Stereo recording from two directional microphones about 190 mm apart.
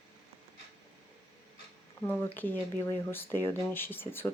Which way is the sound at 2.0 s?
10° left (ahead or behind).